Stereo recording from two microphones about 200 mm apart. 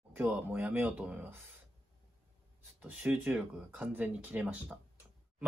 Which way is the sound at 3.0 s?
10° right (ahead or behind).